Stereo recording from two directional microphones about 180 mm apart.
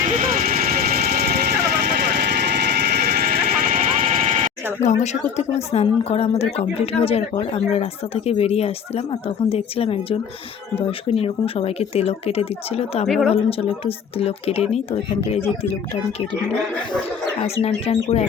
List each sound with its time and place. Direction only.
0.2 s vehicle: 50° right (ahead or behind)
4.8 s speech: 40° left (ahead or behind)
13.1 s speech: centre (ahead or behind)
13.3 s speech: 35° left (ahead or behind)
17.4 s speech: 35° left (ahead or behind)